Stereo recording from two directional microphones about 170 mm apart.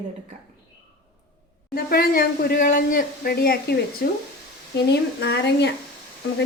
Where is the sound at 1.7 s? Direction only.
65° left (ahead or behind).